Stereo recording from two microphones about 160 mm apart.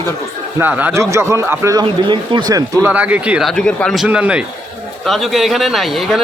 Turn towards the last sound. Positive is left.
turn(degrees=0)  # may be behind; listen again after turning